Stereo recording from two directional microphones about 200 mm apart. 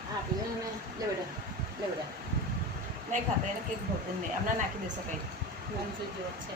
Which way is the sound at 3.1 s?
40° right (ahead or behind).